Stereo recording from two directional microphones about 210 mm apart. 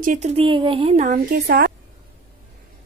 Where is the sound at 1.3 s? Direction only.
50° right (ahead or behind).